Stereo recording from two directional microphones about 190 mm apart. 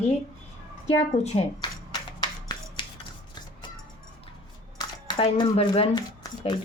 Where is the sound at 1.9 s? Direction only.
20° left (ahead or behind).